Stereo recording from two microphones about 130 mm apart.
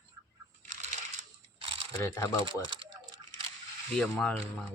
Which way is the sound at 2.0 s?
20° left (ahead or behind).